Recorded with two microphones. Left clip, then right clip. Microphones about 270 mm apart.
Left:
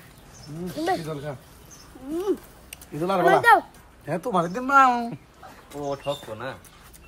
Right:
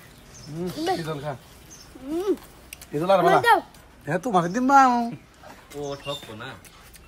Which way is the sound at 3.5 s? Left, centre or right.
Centre.